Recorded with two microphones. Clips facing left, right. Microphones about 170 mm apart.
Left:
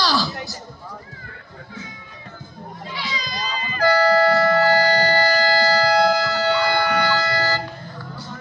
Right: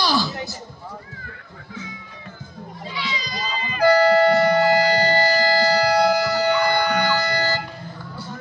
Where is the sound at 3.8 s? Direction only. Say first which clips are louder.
Right 2 dB; 20° right (ahead or behind).